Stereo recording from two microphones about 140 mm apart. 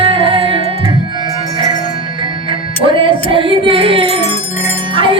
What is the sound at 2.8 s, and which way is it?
Music, 40° right (ahead or behind).